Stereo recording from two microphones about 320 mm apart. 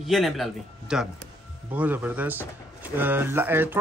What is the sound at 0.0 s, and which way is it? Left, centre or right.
Speech, centre.